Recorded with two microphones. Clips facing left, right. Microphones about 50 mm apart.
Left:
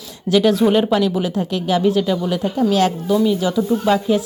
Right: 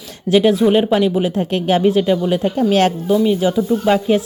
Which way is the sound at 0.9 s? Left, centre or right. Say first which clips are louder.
Right 2 dB; right.